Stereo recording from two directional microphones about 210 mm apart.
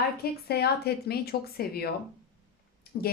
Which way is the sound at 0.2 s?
50° left (ahead or behind).